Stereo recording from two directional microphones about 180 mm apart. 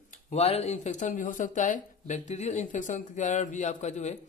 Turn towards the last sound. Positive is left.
turn(degrees=40)  # may be behind; listen again after turning